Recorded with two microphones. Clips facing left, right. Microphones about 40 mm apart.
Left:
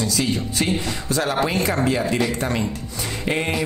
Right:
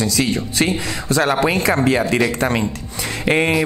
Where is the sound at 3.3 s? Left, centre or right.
Right.